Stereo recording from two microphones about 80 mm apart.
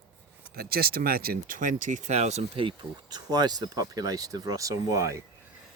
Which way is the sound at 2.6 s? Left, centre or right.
Right.